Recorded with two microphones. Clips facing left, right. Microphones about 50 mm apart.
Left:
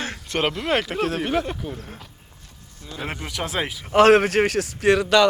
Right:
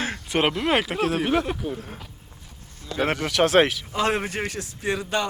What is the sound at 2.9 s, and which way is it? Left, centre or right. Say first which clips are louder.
Speech: right 7 dB; right.